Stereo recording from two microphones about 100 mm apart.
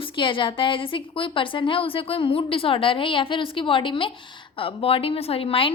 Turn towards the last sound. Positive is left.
turn(degrees=65)  # may be behind; listen again after turning